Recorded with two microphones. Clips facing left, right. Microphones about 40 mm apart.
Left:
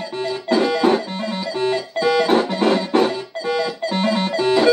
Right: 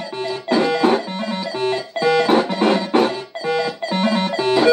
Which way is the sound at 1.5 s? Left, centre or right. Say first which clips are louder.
Left 1 dB; right.